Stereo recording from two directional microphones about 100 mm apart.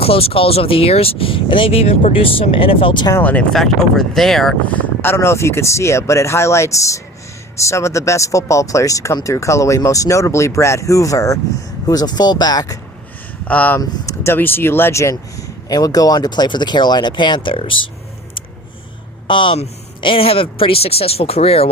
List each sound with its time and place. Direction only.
0.0 s speech: 75° left (ahead or behind); by 3.1 s 55° left (ahead or behind)
3.2 s speech: 15° left (ahead or behind)
3.5 s speech: 5° left (ahead or behind)
4.7 s a sound: 15° left (ahead or behind)
5.1 s speech: 25° left (ahead or behind)
13.4 s speech: 15° left (ahead or behind)
15.1 s speech: 35° left (ahead or behind); by 17.8 s 60° left (ahead or behind)
19.3 s speech: 55° left (ahead or behind); by 21.7 s 85° left